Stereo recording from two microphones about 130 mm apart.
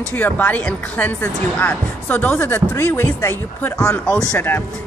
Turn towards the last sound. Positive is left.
turn(degrees=10)  # may be behind; listen again after turning